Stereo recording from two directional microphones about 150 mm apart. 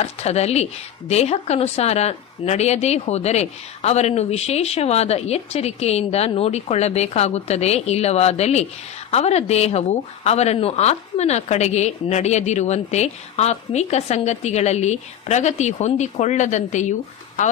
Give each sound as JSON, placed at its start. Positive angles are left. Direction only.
{"t": 0.0, "sound": "a woman's voice", "side_deg": 45}